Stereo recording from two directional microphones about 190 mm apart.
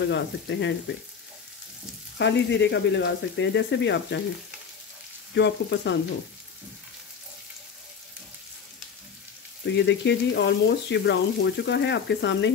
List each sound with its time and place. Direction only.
0.1 s speech: 70° left (ahead or behind)
2.1 s speech: 65° left (ahead or behind)
5.3 s speech: 70° left (ahead or behind)
9.8 s speech: 65° left (ahead or behind)